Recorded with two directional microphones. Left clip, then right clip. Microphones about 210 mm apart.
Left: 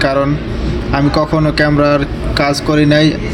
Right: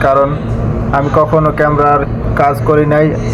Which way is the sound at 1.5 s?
50° left (ahead or behind).